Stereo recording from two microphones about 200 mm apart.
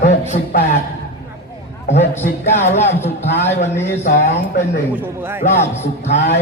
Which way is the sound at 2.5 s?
35° left (ahead or behind).